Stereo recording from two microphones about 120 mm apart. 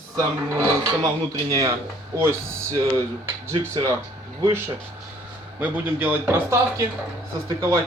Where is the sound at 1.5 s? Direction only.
30° right (ahead or behind).